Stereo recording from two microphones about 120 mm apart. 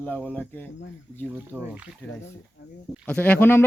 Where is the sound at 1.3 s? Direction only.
15° right (ahead or behind).